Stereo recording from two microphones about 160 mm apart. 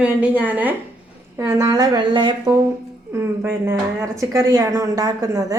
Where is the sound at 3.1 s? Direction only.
15° right (ahead or behind).